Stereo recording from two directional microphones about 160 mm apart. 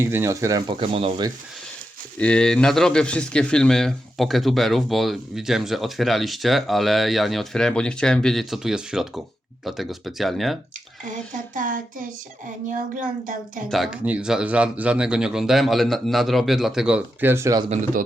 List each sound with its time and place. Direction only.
0.0 s speech: 15° right (ahead or behind)
0.8 s speech: 35° right (ahead or behind)
2.1 s a man's voice: 5° left (ahead or behind)
11.0 s a sound: 55° right (ahead or behind)
13.7 s a man's voice: centre (ahead or behind); by 17.6 s 15° right (ahead or behind)